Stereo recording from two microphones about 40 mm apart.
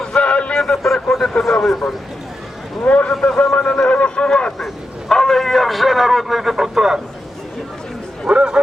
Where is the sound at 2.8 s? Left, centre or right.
Left.